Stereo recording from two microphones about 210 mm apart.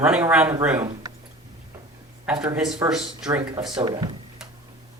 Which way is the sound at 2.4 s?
5° right (ahead or behind).